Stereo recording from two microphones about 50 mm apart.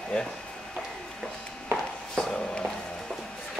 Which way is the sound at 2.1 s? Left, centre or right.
Centre.